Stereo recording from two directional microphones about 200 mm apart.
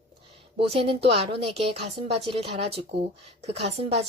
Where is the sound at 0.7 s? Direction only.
25° right (ahead or behind).